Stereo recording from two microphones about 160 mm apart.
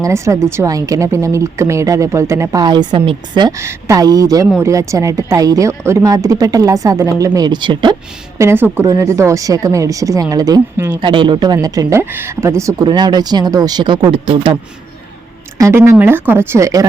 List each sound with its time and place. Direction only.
0.0 s a woman's voice: 20° right (ahead or behind)
8.4 s a woman's voice: 15° right (ahead or behind); by 14.5 s 30° right (ahead or behind)
15.5 s a woman's voice: 15° right (ahead or behind)